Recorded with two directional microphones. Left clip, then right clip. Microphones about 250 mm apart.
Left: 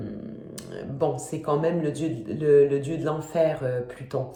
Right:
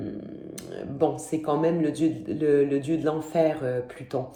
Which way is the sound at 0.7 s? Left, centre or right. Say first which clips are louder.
Right 1 dB; centre.